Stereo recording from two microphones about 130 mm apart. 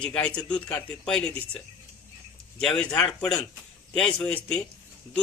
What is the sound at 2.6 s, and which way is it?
A man's voice, 5° left (ahead or behind).